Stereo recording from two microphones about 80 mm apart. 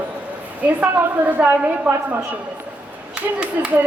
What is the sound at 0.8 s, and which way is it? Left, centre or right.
A woman's voice, centre.